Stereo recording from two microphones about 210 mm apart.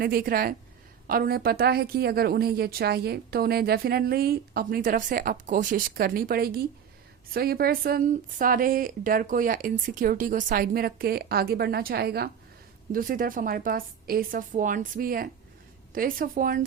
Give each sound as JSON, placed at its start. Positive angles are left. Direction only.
{"t": 0.0, "sound": "a woman's voice", "side_deg": -45}